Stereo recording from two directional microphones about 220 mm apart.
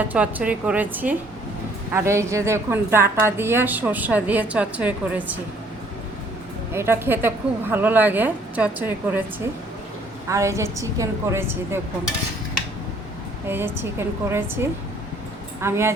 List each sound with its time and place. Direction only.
0.1 s a woman's voice: 5° right (ahead or behind)
6.7 s a woman's voice: 10° right (ahead or behind)
13.5 s a woman's voice: 10° right (ahead or behind)